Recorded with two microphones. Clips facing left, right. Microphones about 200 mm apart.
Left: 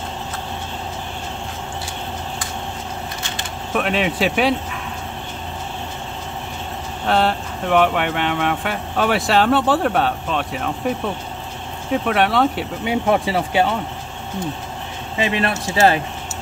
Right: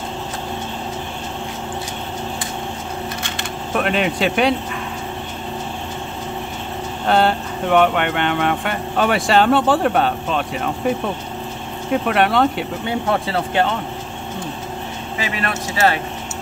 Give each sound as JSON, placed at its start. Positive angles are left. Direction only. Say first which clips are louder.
{"t": 3.7, "sound": "speech", "louder": "right 1 dB", "side_deg": 0}
{"t": 7.1, "sound": "speech", "louder": "right 2 dB", "side_deg": 0}
{"t": 12.1, "sound": "speech", "louder": "right 1 dB", "side_deg": 0}
{"t": 12.8, "sound": "speech", "louder": "left 4 dB", "side_deg": 15}
{"t": 15.1, "sound": "speech", "louder": "left 4 dB", "side_deg": 25}